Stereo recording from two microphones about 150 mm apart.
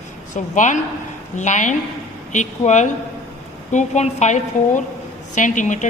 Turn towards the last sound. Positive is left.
turn(degrees=55)  # may be behind; listen again after turning